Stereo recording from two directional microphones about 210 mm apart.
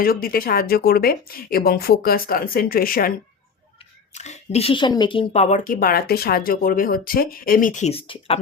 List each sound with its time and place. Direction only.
0.0 s speech: 45° left (ahead or behind)
4.1 s speech: 30° left (ahead or behind)